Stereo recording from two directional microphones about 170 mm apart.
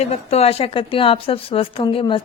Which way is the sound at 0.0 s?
35° left (ahead or behind).